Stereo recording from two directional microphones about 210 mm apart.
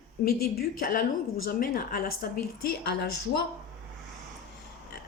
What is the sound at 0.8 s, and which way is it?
A woman's voice, 45° left (ahead or behind).